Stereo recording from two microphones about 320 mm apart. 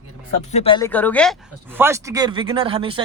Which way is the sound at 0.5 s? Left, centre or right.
Centre.